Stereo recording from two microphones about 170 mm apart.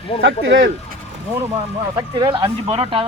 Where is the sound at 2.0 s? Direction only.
25° right (ahead or behind).